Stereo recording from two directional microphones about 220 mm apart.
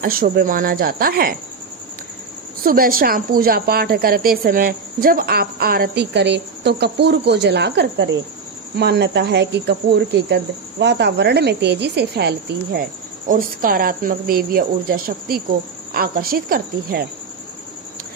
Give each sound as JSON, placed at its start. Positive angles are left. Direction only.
{"t": 0.0, "sound": "speech", "side_deg": -40}
{"t": 2.6, "sound": "speech", "side_deg": -40}
{"t": 13.2, "sound": "speech", "side_deg": -40}